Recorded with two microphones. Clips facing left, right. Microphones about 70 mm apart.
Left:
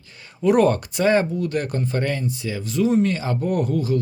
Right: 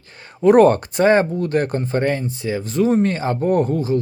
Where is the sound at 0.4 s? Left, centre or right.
Right.